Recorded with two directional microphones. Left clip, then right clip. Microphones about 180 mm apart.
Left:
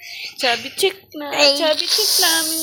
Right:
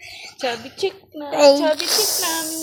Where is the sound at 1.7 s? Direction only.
40° right (ahead or behind).